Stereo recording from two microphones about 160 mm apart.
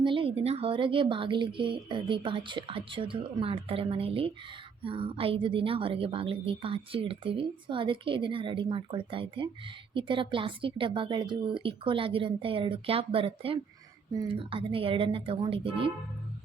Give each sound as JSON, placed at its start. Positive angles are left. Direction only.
{"t": 0.0, "sound": "a woman's voice", "side_deg": -30}